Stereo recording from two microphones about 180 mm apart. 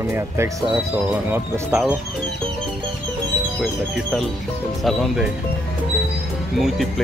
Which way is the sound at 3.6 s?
5° left (ahead or behind).